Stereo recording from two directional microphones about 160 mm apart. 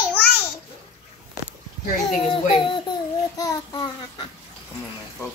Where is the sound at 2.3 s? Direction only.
30° left (ahead or behind).